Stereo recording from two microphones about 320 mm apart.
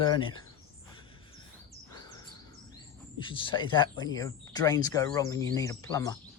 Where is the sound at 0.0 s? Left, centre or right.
Centre.